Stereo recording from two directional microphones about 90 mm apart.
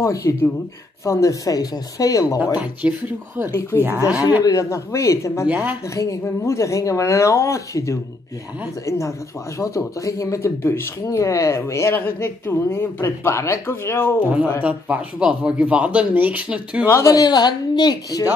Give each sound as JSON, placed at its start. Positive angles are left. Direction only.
{"t": 0.0, "sound": "speech", "side_deg": 35}
{"t": 2.5, "sound": "speech", "side_deg": -15}
{"t": 4.4, "sound": "speech", "side_deg": 40}
{"t": 5.5, "sound": "speech", "side_deg": -15}
{"t": 5.9, "sound": "speech", "side_deg": 35}
{"t": 14.2, "sound": "speech", "side_deg": -15}
{"t": 16.9, "sound": "speech", "side_deg": 40}